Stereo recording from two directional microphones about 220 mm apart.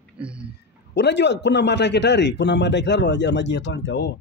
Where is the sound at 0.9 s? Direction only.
50° left (ahead or behind).